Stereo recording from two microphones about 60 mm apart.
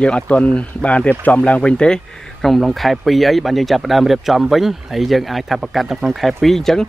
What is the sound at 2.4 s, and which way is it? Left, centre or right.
Speech, centre.